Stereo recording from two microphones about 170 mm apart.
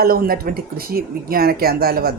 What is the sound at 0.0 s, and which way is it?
Speech, 60° right (ahead or behind).